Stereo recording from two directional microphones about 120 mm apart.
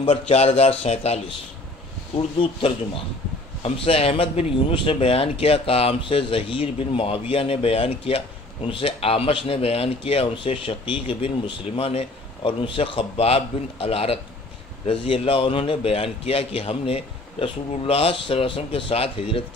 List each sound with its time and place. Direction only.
0.0 s a man's voice: 60° left (ahead or behind)
2.1 s speech: 40° left (ahead or behind)
3.6 s speech: 55° left (ahead or behind)